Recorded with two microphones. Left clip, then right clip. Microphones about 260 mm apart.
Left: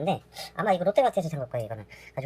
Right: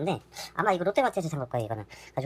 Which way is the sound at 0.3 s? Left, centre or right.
Right.